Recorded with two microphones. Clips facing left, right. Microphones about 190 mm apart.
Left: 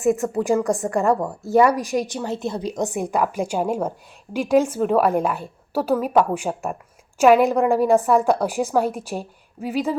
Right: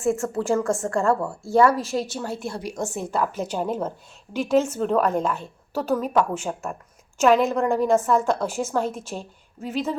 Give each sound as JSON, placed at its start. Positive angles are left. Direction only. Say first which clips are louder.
{"t": 0.0, "sound": "a woman's voice", "louder": "left 3 dB", "side_deg": 15}